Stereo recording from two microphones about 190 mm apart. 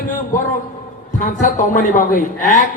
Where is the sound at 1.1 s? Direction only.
40° left (ahead or behind).